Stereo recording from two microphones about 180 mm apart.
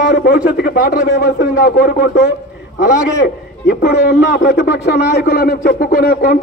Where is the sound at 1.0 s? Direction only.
70° left (ahead or behind).